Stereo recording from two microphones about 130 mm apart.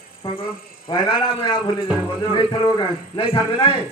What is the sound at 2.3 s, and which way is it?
A man's voice, 40° left (ahead or behind).